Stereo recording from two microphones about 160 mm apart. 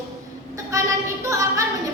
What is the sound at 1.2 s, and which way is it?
Speech, 20° right (ahead or behind).